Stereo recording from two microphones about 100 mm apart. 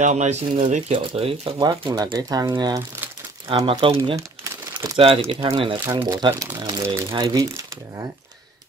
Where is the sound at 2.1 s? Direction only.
40° right (ahead or behind).